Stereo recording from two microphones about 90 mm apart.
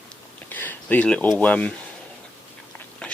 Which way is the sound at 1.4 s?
15° left (ahead or behind).